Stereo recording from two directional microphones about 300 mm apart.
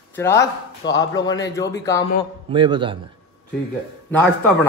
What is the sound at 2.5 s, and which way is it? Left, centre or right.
Speech, centre.